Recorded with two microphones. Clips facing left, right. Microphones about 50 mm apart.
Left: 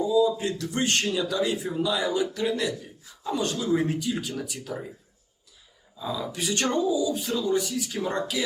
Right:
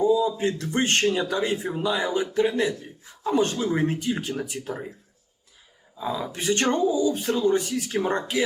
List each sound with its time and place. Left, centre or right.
0.0 s speech: right
6.0 s speech: right